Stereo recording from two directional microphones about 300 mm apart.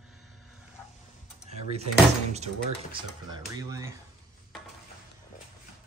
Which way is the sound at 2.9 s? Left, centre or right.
Centre.